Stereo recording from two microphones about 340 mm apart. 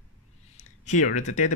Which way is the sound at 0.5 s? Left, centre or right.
Left.